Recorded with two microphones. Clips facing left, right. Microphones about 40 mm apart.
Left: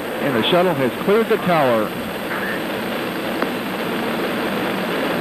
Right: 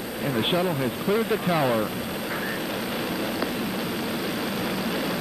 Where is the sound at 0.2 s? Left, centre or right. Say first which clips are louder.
Left 8 dB; left.